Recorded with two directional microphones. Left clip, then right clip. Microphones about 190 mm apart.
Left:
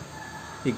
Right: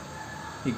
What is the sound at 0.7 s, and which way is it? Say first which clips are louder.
Speech: left 4 dB; 45° left (ahead or behind).